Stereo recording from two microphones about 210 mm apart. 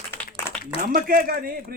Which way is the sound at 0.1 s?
10° left (ahead or behind).